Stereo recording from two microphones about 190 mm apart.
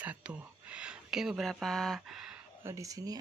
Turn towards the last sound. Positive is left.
turn(degrees=-20)  # may be behind; listen again after turning